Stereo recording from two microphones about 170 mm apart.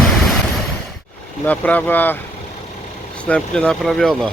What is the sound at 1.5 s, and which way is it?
Speech, 10° left (ahead or behind).